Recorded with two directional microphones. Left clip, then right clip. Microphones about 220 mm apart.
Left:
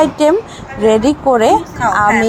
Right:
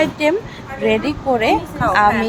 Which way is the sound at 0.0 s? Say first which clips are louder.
Left 5 dB; 20° left (ahead or behind).